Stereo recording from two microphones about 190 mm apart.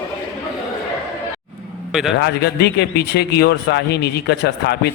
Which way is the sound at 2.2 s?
60° left (ahead or behind).